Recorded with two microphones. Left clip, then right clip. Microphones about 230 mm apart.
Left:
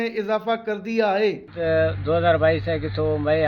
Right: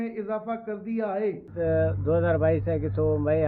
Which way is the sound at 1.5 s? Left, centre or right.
Centre.